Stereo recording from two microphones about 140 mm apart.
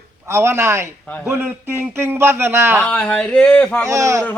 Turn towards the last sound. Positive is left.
turn(degrees=-20)  # may be behind; listen again after turning